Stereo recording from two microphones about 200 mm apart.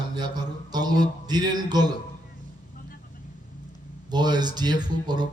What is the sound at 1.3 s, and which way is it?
Speech, 20° right (ahead or behind).